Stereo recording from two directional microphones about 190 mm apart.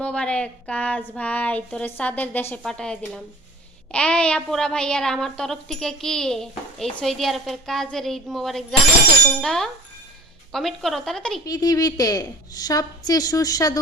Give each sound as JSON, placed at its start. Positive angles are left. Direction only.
{"t": 0.0, "sound": "a woman's voice", "side_deg": 5}
{"t": 11.4, "sound": "a woman's voice", "side_deg": 20}